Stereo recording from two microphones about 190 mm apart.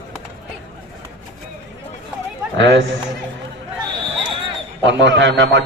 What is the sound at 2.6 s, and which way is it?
Speech, 75° right (ahead or behind).